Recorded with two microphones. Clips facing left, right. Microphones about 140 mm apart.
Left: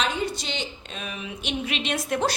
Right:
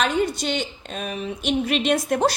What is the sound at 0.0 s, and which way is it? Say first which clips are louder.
A woman's voice: right 5 dB; 50° right (ahead or behind).